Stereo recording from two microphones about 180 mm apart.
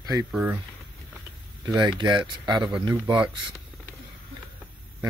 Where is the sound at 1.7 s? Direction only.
25° right (ahead or behind).